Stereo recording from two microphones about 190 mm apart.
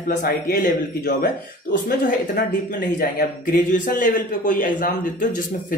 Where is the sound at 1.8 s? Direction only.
45° left (ahead or behind).